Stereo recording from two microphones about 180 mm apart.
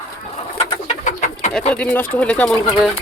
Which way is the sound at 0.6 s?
40° left (ahead or behind).